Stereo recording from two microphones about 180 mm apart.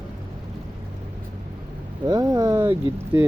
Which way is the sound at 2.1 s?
20° right (ahead or behind).